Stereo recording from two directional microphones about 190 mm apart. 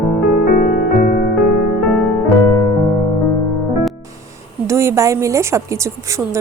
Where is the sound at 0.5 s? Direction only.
50° left (ahead or behind).